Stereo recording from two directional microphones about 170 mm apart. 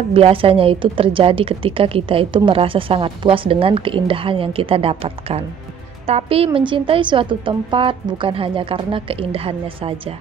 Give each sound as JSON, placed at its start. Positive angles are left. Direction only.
{"t": 0.1, "sound": "a woman's voice", "side_deg": -30}